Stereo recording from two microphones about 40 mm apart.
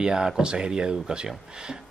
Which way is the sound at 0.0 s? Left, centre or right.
Centre.